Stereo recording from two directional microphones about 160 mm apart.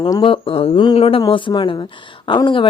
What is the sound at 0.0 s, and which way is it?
Speech, 30° left (ahead or behind).